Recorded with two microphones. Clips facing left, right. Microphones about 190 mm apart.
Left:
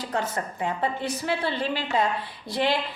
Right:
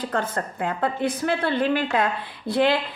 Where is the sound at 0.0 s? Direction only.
55° right (ahead or behind).